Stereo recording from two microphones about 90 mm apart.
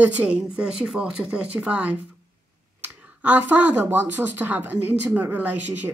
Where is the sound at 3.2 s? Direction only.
20° right (ahead or behind).